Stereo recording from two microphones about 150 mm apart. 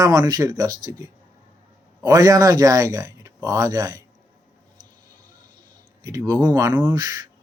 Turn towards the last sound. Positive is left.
turn(degrees=-25)  # may be behind; listen again after turning